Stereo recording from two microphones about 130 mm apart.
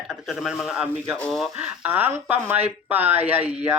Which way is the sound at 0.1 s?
5° right (ahead or behind).